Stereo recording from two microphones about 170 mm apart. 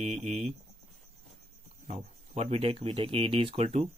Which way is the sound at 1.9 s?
40° right (ahead or behind).